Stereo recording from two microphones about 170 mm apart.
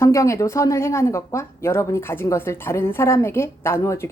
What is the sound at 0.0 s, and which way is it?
A woman's voice, 15° left (ahead or behind).